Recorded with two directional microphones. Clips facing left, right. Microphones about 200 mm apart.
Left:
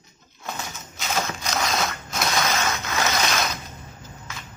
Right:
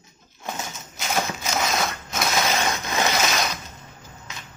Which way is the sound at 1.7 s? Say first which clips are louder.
Even; centre (ahead or behind).